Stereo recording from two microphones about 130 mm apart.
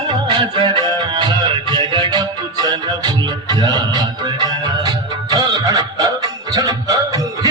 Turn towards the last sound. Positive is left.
turn(degrees=-25)  # may be behind; listen again after turning